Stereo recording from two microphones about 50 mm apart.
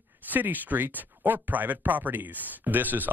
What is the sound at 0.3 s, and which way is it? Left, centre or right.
Speech, right.